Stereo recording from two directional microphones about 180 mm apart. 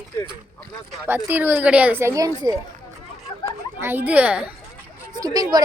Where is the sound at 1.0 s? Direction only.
10° right (ahead or behind).